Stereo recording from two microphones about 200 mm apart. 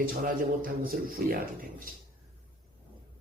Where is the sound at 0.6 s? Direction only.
45° right (ahead or behind).